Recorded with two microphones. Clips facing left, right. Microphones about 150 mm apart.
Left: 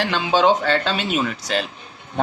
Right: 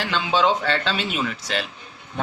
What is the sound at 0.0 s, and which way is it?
Speech, 45° left (ahead or behind).